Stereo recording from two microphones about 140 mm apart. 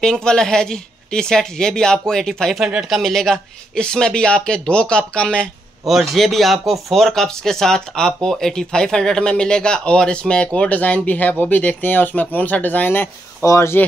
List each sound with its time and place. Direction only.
0.0 s speech: 5° left (ahead or behind)